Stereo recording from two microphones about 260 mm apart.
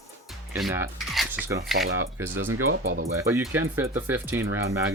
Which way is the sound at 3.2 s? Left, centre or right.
Centre.